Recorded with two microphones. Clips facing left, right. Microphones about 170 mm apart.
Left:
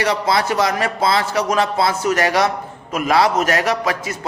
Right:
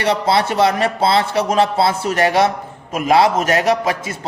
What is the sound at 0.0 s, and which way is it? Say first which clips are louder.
A man's voice: right 2 dB; 30° right (ahead or behind).